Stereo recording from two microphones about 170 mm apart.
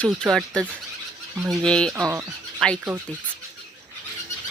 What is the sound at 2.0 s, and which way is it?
Speech, 20° right (ahead or behind).